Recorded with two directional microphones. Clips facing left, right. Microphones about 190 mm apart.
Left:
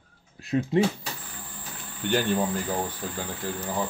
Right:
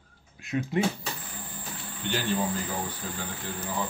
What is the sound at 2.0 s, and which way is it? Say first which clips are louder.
Speech: left 6 dB; 50° left (ahead or behind).